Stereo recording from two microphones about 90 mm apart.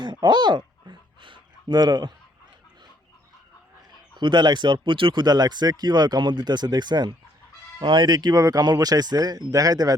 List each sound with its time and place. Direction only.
0.0 s a sound: 55° right (ahead or behind)
3.8 s speech: 55° right (ahead or behind)
5.2 s speech: 50° right (ahead or behind)